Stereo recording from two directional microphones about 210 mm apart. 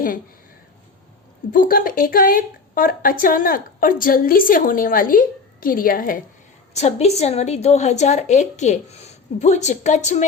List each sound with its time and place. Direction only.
1.5 s a woman's voice: 40° left (ahead or behind)
6.7 s a woman's voice: 30° left (ahead or behind)